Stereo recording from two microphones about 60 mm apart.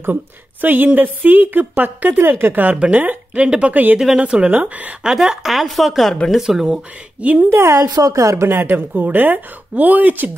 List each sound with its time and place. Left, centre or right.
0.1 s a woman's voice: right
3.4 s speech: centre
3.7 s speech: right
5.0 s a woman's voice: centre
7.2 s a woman's voice: right
7.5 s a woman's voice: right
7.8 s a woman's voice: right
8.5 s a woman's voice: right